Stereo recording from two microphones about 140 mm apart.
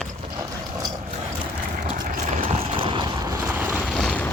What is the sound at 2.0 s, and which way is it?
Clip-clop, 55° right (ahead or behind).